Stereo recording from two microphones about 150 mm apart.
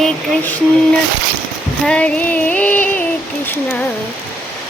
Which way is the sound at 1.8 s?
5° left (ahead or behind).